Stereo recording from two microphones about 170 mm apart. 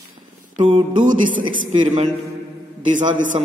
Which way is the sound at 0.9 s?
50° right (ahead or behind).